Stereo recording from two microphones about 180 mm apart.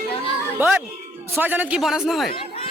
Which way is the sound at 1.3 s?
10° right (ahead or behind).